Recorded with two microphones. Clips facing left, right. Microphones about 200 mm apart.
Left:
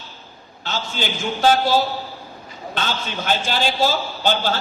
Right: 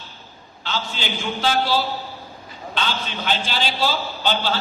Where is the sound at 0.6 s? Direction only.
45° left (ahead or behind).